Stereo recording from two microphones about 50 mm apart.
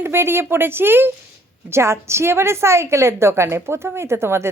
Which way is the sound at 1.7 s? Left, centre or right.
Right.